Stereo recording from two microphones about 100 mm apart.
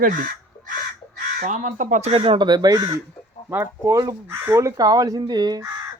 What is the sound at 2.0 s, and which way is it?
Speech, 80° right.